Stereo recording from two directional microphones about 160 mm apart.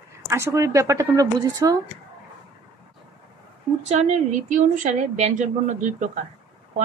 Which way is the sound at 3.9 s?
45° right (ahead or behind).